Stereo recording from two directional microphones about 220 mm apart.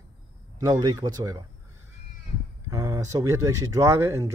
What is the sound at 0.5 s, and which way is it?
Speech, 15° right (ahead or behind).